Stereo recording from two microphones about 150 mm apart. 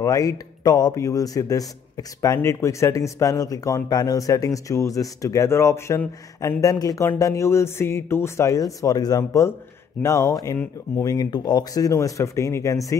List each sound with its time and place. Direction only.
0.0 s speech: 20° left (ahead or behind)